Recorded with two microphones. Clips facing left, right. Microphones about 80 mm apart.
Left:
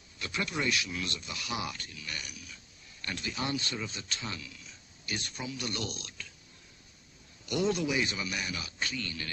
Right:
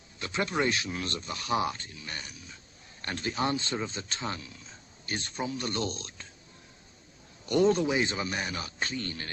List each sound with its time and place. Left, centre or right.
0.2 s speech: right
7.4 s speech: right